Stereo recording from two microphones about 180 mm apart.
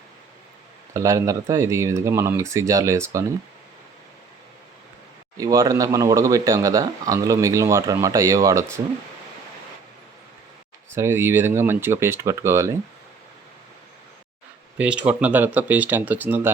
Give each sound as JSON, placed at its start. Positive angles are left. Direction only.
{"t": 0.9, "sound": "speech", "side_deg": -20}
{"t": 5.4, "sound": "speech", "side_deg": -20}
{"t": 10.9, "sound": "speech", "side_deg": -15}
{"t": 14.8, "sound": "speech", "side_deg": -5}